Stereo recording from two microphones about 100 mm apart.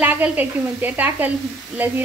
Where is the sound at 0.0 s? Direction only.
15° right (ahead or behind).